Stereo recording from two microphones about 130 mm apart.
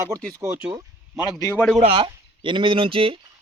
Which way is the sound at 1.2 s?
30° left (ahead or behind).